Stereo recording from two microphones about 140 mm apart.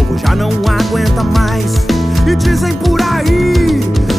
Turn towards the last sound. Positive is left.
turn(degrees=0)  # may be behind; listen again after turning